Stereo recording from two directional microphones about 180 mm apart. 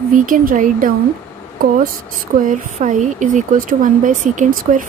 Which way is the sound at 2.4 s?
45° right (ahead or behind).